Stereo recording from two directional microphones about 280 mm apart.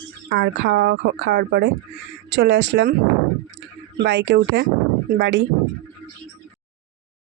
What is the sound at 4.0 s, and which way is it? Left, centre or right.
Speech, right.